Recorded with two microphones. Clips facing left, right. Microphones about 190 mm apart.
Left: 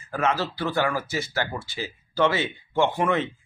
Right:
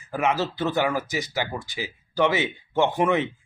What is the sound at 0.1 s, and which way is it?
Speech, 15° right (ahead or behind).